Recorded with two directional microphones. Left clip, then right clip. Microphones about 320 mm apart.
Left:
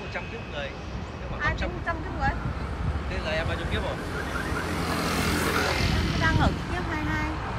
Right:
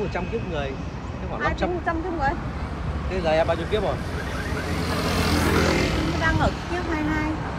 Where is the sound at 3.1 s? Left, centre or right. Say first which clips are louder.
Right 9 dB; centre.